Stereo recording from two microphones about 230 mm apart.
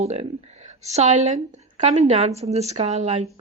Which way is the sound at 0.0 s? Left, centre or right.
Right.